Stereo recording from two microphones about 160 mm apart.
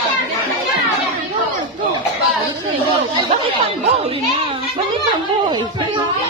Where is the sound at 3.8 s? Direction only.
40° right (ahead or behind).